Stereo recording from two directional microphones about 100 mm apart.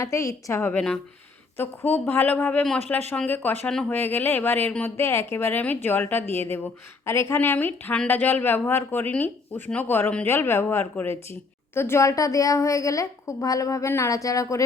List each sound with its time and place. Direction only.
0.0 s a woman's voice: 30° left (ahead or behind)
0.6 s a woman's voice: 10° left (ahead or behind); by 14.6 s 35° left (ahead or behind)